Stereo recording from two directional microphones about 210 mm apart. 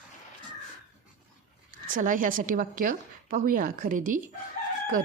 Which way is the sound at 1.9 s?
40° right (ahead or behind).